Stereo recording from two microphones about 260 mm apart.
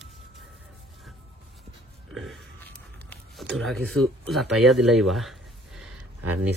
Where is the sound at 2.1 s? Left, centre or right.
Centre.